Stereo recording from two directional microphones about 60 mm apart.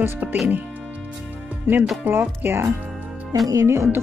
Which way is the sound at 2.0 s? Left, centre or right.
Right.